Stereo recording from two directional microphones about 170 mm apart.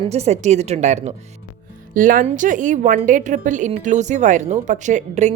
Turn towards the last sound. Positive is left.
turn(degrees=-45)  # may be behind; listen again after turning